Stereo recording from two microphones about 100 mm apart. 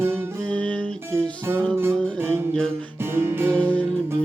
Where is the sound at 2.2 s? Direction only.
25° right (ahead or behind).